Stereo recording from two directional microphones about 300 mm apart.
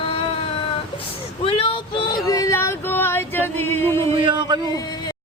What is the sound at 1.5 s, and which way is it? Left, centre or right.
Female singing, centre.